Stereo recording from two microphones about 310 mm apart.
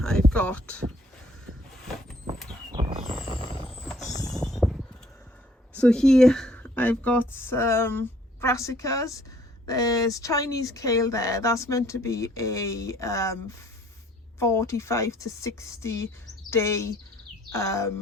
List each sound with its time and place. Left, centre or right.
0.0 s a sound: centre
2.7 s bird: centre
3.3 s squeal: centre
3.8 s clip-clop: centre
4.0 s creak: centre
4.3 s a sound: centre
5.7 s speech: centre